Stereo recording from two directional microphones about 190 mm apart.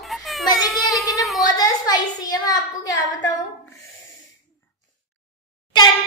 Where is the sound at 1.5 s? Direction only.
20° left (ahead or behind).